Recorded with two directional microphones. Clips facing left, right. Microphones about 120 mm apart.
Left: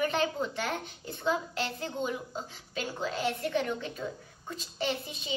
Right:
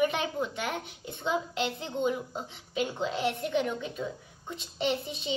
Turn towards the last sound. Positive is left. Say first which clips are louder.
# right 4 dB
turn(degrees=-25)  # may be behind; listen again after turning